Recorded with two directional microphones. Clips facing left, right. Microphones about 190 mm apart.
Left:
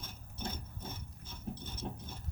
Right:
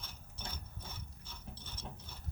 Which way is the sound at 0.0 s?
45° left (ahead or behind).